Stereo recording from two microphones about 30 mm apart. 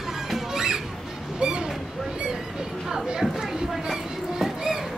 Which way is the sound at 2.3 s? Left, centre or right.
Centre.